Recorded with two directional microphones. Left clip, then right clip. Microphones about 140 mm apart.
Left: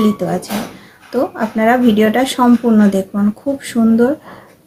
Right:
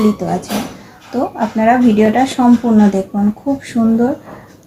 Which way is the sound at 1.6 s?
20° left (ahead or behind).